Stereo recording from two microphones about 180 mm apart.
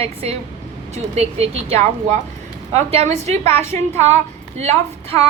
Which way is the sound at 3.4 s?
15° left (ahead or behind).